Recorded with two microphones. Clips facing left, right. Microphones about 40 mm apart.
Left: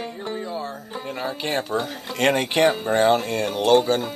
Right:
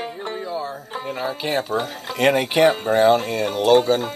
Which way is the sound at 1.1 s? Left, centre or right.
Centre.